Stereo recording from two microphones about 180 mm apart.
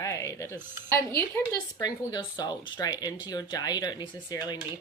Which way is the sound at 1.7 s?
20° left (ahead or behind).